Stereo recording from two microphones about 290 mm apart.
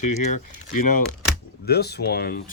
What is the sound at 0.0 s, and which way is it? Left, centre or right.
Speech, left.